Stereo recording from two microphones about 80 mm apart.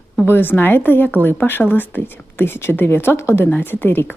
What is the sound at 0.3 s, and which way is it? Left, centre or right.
Speech, left.